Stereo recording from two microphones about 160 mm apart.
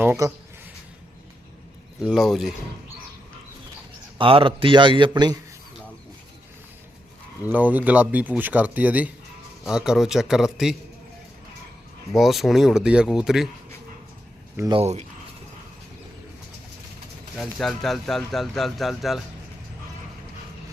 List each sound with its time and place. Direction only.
0.0 s speech: 15° right (ahead or behind)
2.0 s speech: centre (ahead or behind)
4.2 s a man's voice: 35° right (ahead or behind)
7.4 s speech: 10° right (ahead or behind)
12.1 s speech: centre (ahead or behind)
14.7 s a man's voice: 40° right (ahead or behind)
17.3 s speech: centre (ahead or behind)